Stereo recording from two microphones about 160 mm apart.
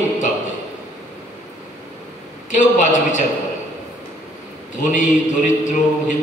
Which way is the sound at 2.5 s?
50° left (ahead or behind).